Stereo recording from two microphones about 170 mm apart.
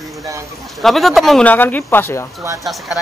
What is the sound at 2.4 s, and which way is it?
Speech, 20° right (ahead or behind).